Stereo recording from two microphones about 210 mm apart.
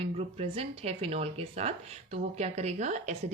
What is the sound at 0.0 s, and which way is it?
Speech, 30° right (ahead or behind).